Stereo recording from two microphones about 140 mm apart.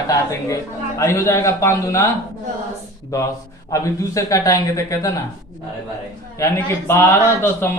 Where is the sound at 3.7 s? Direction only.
25° left (ahead or behind).